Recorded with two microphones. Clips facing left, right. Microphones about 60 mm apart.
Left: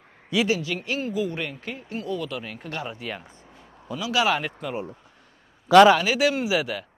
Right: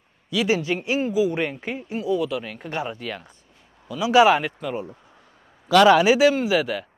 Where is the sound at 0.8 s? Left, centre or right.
Centre.